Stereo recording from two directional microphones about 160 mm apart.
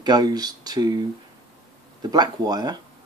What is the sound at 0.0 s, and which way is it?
Speech, 25° right (ahead or behind).